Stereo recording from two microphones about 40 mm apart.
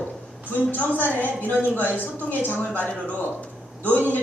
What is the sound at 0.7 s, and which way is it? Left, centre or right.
Speech, left.